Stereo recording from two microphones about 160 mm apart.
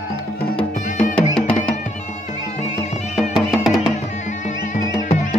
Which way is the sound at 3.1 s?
Centre (ahead or behind).